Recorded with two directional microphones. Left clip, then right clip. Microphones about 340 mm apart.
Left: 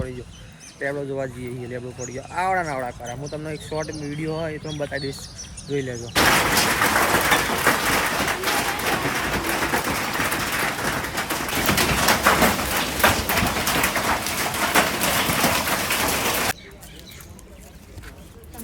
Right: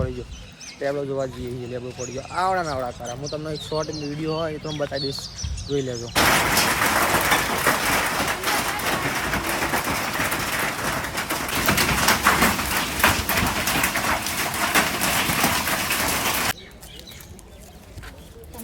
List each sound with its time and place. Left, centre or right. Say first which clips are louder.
0.8 s speech: right 1 dB; centre
5.7 s vehicle: even; centre